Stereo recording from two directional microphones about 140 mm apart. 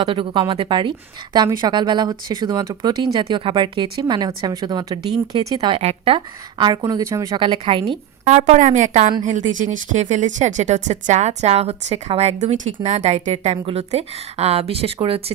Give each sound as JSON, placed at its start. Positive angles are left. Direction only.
{"t": 0.0, "sound": "a woman's voice", "side_deg": -35}
{"t": 5.5, "sound": "speech", "side_deg": -45}
{"t": 6.1, "sound": "speech", "side_deg": -30}
{"t": 7.3, "sound": "a woman's voice", "side_deg": -35}
{"t": 8.2, "sound": "a woman's voice", "side_deg": -50}